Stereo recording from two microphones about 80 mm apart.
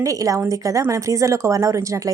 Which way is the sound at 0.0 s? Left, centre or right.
Right.